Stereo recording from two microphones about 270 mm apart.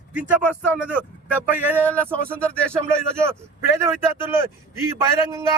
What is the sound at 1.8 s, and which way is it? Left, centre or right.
Speech, centre.